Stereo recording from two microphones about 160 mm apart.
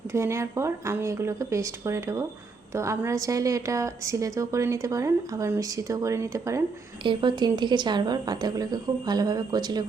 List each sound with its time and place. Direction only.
0.1 s a woman's voice: 15° right (ahead or behind)
7.0 s a woman's voice: 30° right (ahead or behind)